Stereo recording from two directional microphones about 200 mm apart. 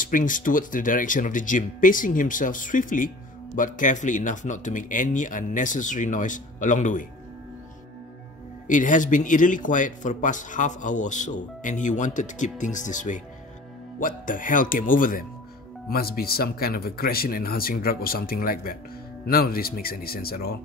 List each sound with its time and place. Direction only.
0.0 s a man's voice: 40° left (ahead or behind)
8.6 s a man's voice: 40° left (ahead or behind)